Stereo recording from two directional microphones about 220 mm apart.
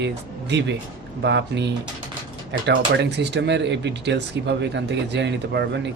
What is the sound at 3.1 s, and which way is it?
Speech, 50° right (ahead or behind).